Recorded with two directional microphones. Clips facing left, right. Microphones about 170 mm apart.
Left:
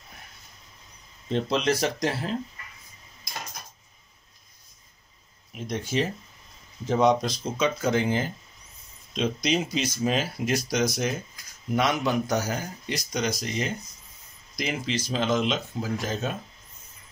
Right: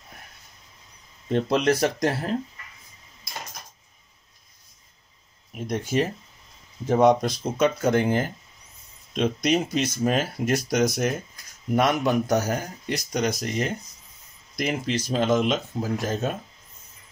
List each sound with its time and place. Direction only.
1.3 s speech: 55° right (ahead or behind)
5.5 s speech: 50° right (ahead or behind)